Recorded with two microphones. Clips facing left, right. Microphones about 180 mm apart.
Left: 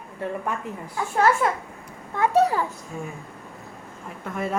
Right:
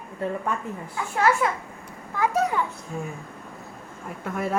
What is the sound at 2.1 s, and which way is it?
Speech, 30° left (ahead or behind).